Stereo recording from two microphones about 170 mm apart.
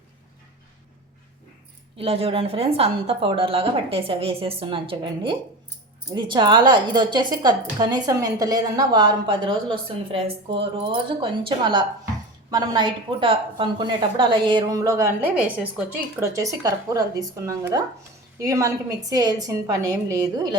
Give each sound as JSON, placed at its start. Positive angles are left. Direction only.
{"t": 2.0, "sound": "a woman's voice", "side_deg": -35}